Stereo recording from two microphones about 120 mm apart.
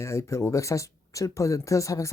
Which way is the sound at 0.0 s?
25° left (ahead or behind).